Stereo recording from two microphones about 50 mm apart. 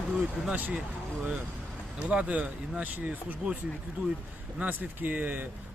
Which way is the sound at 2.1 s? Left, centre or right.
Right.